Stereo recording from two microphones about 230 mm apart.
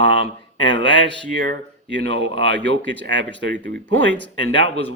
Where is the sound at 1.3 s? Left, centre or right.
Right.